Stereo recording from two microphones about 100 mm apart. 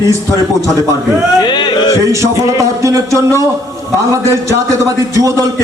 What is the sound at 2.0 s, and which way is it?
Speech, 30° right (ahead or behind).